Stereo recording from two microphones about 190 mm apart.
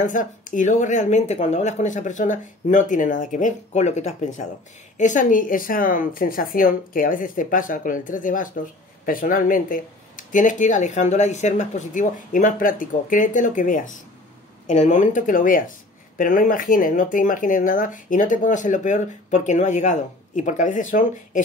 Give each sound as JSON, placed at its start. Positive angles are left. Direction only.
{"t": 0.0, "sound": "speech", "side_deg": 45}